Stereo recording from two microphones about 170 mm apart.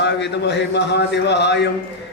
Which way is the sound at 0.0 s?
90° left.